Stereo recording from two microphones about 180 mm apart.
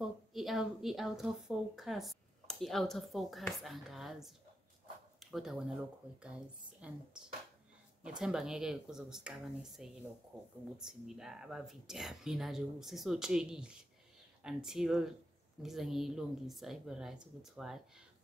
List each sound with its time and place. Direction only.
0.0 s a woman's voice: centre (ahead or behind)
10.9 s a woman's voice: 5° right (ahead or behind)